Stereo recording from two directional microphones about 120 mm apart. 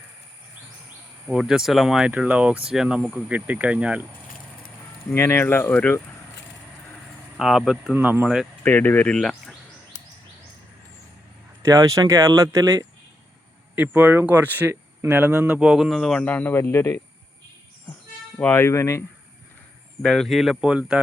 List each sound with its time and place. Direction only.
1.3 s speech: 5° right (ahead or behind)
5.1 s speech: 20° left (ahead or behind)
7.3 s speech: centre (ahead or behind)
7.9 s speech: 15° right (ahead or behind)
8.6 s speech: 15° left (ahead or behind)
11.6 s speech: 25° right (ahead or behind); by 17.0 s 20° left (ahead or behind)
18.3 s speech: 15° left (ahead or behind)
20.0 s speech: 5° left (ahead or behind)